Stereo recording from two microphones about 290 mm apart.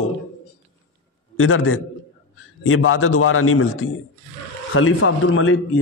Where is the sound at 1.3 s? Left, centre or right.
Left.